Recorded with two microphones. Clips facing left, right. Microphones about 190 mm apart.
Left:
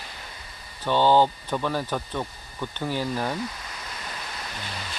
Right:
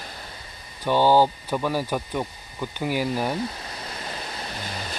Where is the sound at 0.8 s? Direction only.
10° right (ahead or behind).